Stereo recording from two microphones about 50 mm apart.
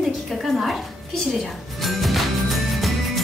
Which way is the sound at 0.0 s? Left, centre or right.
Centre.